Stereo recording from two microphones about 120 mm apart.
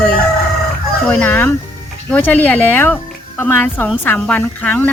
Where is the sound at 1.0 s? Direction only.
15° left (ahead or behind).